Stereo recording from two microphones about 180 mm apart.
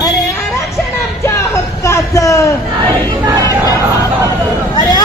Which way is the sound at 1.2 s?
15° left (ahead or behind).